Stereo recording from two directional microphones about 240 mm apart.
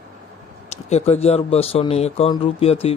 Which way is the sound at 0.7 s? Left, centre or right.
Left.